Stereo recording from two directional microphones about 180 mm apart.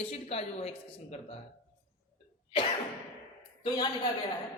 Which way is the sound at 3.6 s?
25° left (ahead or behind).